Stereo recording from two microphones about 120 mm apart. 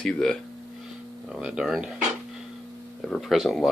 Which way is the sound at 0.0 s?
5° left (ahead or behind).